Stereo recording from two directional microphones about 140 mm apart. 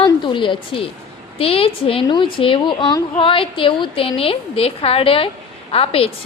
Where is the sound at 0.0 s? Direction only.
35° left (ahead or behind).